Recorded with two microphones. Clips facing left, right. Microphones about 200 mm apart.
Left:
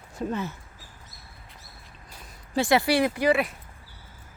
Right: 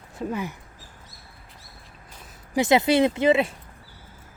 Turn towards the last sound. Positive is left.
turn(degrees=-25)  # may be behind; listen again after turning